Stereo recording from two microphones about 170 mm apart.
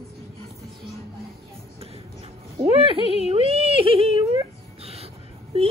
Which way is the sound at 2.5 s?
35° right (ahead or behind).